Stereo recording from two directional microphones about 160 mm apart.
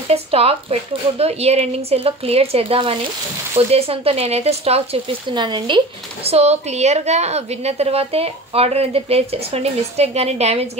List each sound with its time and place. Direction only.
0.1 s a woman's voice: 40° right (ahead or behind)
6.2 s a woman's voice: 40° right (ahead or behind)